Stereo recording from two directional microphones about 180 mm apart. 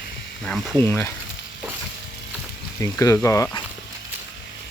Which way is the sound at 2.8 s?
20° left (ahead or behind).